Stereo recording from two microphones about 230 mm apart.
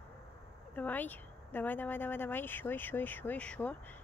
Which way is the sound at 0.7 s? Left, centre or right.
Centre.